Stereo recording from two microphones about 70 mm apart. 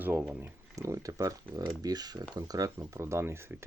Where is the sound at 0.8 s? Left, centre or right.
Right.